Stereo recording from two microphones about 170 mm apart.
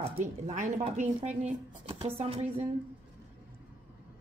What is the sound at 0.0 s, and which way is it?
Speech, 35° right (ahead or behind).